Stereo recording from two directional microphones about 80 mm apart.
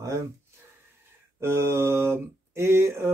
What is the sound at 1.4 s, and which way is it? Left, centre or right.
Speech, right.